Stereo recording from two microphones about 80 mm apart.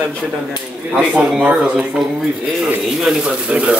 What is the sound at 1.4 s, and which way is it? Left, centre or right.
A man's voice, centre.